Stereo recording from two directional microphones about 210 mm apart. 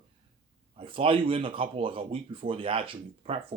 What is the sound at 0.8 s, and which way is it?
Speech, 25° right (ahead or behind).